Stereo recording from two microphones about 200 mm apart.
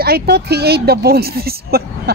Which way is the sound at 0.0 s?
50° right (ahead or behind).